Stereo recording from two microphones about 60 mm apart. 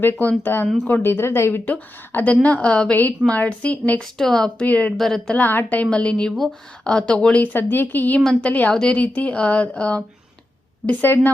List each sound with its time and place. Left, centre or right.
0.0 s speech: left
1.6 s a woman's voice: left
4.0 s speech: centre
4.6 s a woman's voice: left
4.9 s a woman's voice: centre
5.3 s a woman's voice: left
7.4 s a woman's voice: left
8.7 s a woman's voice: centre